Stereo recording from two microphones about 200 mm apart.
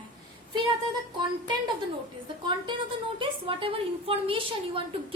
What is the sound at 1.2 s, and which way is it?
Speech, 20° right (ahead or behind).